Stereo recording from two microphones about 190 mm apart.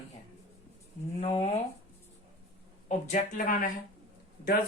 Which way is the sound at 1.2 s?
35° left (ahead or behind).